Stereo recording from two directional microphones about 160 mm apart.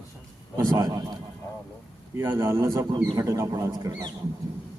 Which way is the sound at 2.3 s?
25° right (ahead or behind).